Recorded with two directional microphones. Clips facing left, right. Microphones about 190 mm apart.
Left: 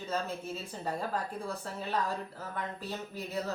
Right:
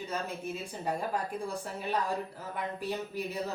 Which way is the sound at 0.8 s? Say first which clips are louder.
Right 2 dB; 15° right (ahead or behind).